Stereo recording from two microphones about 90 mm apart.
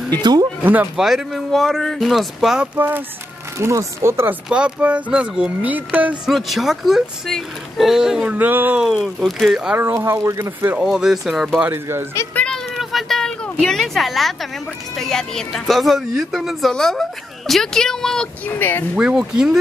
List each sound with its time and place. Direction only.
0.1 s speech: 50° right (ahead or behind)
0.9 s speech: 5° right (ahead or behind)
3.5 s speech: 35° right (ahead or behind)
4.5 s speech: 10° right (ahead or behind)
6.2 s speech: centre (ahead or behind); by 8.8 s 20° right (ahead or behind)
8.8 s speech: centre (ahead or behind)
9.8 s speech: 25° right (ahead or behind)
10.8 s speech: 5° right (ahead or behind)
11.6 s speech: 30° right (ahead or behind)
12.4 s a sound: centre (ahead or behind)
15.0 s speech: 5° left (ahead or behind)
18.6 s speech: 20° left (ahead or behind)
18.9 s speech: 10° right (ahead or behind)